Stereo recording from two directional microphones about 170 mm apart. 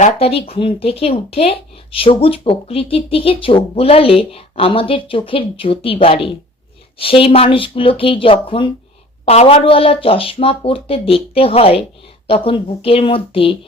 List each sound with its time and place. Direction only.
0.0 s speech: 35° left (ahead or behind)